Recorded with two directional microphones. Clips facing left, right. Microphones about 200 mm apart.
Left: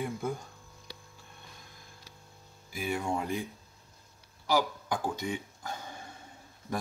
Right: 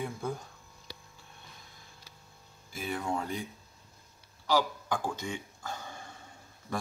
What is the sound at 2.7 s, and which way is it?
Speech, 10° left (ahead or behind).